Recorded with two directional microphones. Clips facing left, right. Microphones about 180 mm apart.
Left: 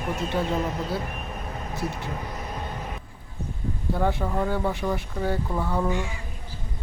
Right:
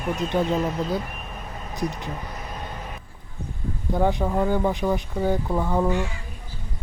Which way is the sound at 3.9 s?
15° right (ahead or behind).